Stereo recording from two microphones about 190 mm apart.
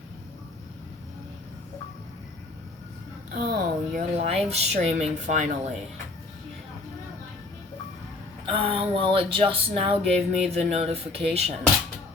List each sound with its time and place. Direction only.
3.3 s speech: 45° right (ahead or behind)
4.2 s speech: 35° right (ahead or behind)
8.5 s speech: 30° right (ahead or behind)